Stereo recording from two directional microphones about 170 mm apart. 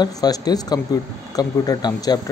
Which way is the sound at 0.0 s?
25° left (ahead or behind).